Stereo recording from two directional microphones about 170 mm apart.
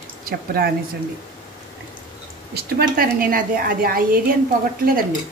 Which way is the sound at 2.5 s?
60° right (ahead or behind).